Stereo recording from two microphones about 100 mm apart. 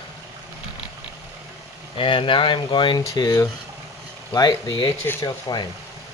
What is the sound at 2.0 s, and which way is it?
Speech, 60° left (ahead or behind).